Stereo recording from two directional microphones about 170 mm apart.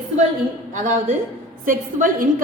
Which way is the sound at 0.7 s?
50° right (ahead or behind).